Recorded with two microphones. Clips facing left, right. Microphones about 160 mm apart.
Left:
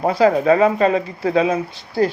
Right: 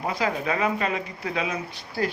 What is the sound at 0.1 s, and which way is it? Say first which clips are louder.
Speech: left 13 dB; 40° left (ahead or behind).